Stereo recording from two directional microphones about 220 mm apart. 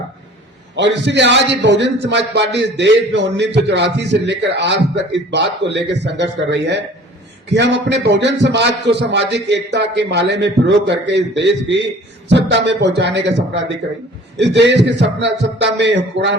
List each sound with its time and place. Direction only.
0.8 s a man's voice: 55° right (ahead or behind)